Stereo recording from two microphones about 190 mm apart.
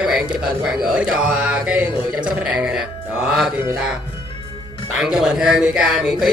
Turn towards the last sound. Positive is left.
turn(degrees=0)  # may be behind; listen again after turning